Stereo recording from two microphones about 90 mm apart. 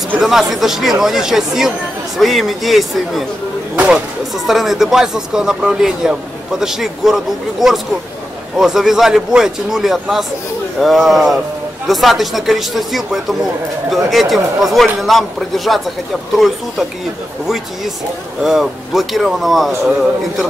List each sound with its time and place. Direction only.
0.2 s speech: 5° right (ahead or behind)
3.7 s speech: 15° right (ahead or behind)
4.3 s speech: centre (ahead or behind)
8.5 s speech: 5° right (ahead or behind)
18.4 s speech: 5° right (ahead or behind)